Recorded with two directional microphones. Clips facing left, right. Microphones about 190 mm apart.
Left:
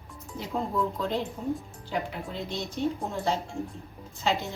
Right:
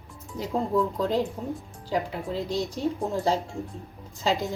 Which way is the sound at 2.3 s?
35° right (ahead or behind).